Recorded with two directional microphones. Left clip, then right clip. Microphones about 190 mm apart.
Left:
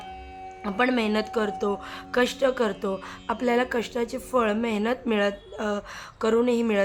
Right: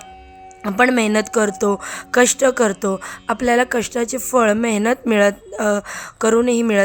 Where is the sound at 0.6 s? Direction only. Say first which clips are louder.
Right 9 dB; 25° right (ahead or behind).